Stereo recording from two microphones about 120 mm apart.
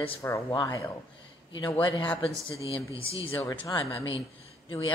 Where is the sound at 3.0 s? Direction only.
50° left (ahead or behind).